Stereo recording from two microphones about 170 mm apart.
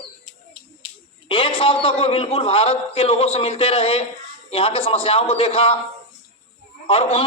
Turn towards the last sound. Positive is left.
turn(degrees=35)  # may be behind; listen again after turning